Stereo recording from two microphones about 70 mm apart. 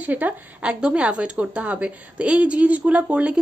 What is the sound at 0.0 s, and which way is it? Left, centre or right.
A woman's voice, right.